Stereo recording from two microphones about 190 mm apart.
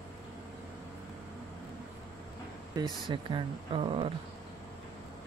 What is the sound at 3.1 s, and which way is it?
Speech, 25° right (ahead or behind).